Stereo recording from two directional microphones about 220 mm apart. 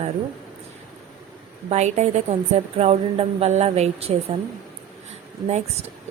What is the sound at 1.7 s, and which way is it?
A woman's voice, 30° right (ahead or behind).